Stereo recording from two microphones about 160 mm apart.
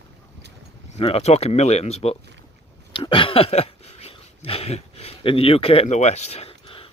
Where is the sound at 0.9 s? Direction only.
40° left (ahead or behind).